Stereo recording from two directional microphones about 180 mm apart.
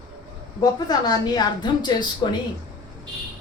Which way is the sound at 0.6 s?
20° left (ahead or behind).